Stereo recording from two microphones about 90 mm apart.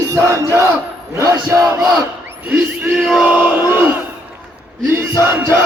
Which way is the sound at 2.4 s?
20° right (ahead or behind).